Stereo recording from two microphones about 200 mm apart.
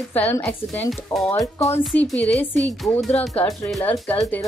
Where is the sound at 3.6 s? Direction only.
Centre (ahead or behind).